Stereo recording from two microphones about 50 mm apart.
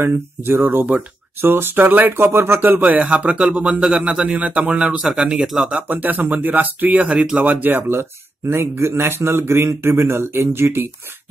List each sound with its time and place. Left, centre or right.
0.0 s speech: right
0.7 s speech: right
1.4 s speech: right
2.3 s speech: right
5.9 s speech: right
7.9 s speech: right